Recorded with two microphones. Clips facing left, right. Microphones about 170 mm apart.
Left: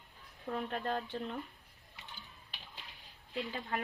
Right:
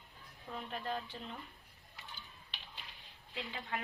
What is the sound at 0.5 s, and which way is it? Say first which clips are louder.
Speech: left 5 dB; 60° left (ahead or behind).